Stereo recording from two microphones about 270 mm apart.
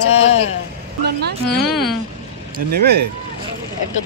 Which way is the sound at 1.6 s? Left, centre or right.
Centre.